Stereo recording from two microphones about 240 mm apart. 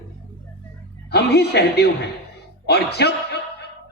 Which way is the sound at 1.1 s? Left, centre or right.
Left.